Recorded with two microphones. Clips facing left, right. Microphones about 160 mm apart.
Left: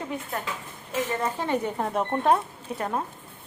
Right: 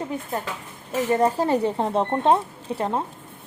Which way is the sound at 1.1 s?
35° right (ahead or behind).